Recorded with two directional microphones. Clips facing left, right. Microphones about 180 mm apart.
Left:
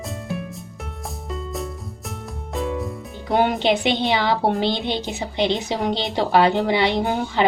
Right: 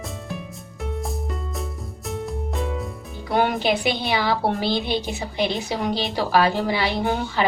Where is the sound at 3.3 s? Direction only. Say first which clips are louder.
Left 2 dB; 20° left (ahead or behind).